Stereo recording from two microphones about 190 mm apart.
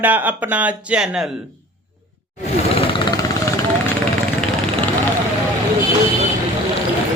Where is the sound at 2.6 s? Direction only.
30° left (ahead or behind).